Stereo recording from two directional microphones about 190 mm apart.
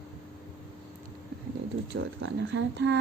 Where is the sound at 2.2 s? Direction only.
70° right (ahead or behind).